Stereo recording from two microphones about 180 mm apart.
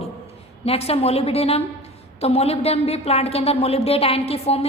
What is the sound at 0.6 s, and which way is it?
A woman's voice, 35° left (ahead or behind).